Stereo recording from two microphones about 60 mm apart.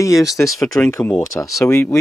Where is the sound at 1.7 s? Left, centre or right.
Left.